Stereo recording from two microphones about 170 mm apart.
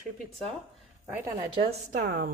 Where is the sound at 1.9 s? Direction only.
50° right (ahead or behind).